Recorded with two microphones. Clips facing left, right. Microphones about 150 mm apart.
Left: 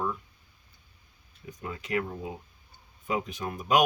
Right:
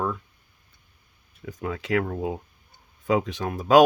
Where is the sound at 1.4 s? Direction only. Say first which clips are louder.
Right 7 dB; 90° right; by 2.3 s 75° right (ahead or behind).